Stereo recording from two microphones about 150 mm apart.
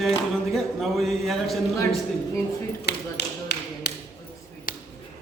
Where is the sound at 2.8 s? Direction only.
90° left.